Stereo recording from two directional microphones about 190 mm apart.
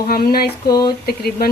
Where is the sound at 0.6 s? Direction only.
20° left (ahead or behind).